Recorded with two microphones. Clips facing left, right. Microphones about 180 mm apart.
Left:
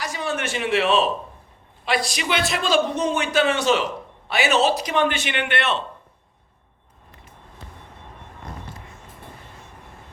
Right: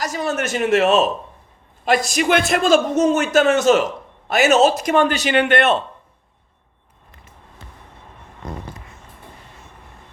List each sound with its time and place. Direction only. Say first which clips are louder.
0.0 s a man's voice: right 4 dB; 40° right (ahead or behind)